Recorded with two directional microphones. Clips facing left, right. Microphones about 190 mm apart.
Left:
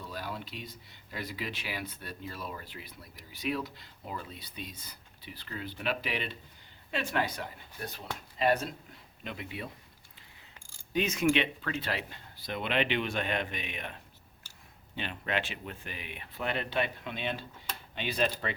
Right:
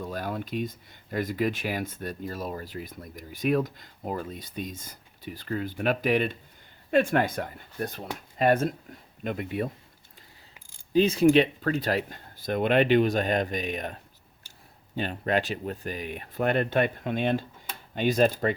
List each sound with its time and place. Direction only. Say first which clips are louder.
0.0 s speech: right 7 dB; 50° right (ahead or behind)
10.9 s speech: right 8 dB; 30° right (ahead or behind)